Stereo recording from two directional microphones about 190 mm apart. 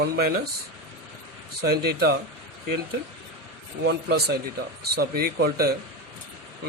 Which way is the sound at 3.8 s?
60° right (ahead or behind).